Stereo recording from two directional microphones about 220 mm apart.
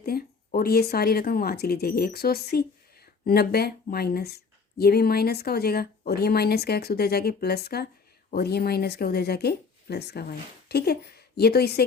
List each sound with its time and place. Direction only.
0.0 s speech: 45° left (ahead or behind)